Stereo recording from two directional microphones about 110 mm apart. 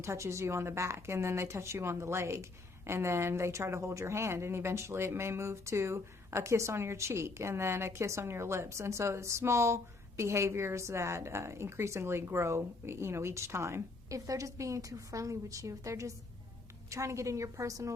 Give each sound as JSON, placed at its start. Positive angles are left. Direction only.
{"t": 0.0, "sound": "a woman's voice", "side_deg": -25}